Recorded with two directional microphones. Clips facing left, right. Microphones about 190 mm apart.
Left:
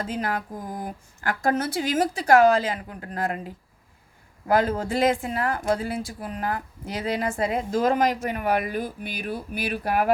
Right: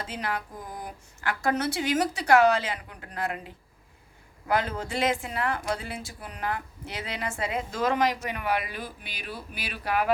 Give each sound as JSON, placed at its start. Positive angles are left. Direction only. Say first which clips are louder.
{"t": 0.0, "sound": "a woman's voice", "louder": "left 5 dB", "side_deg": 45}